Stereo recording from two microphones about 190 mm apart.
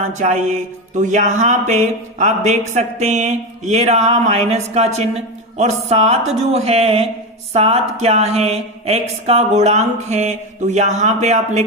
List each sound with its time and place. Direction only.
0.1 s mantra: 40° right (ahead or behind)